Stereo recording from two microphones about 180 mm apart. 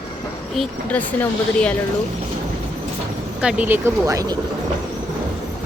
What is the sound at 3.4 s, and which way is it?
Speech, 10° right (ahead or behind).